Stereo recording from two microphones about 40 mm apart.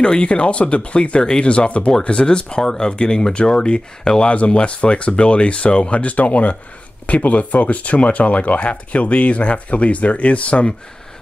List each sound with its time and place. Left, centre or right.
0.0 s speech: left